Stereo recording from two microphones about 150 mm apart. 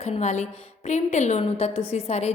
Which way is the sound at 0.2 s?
50° left (ahead or behind).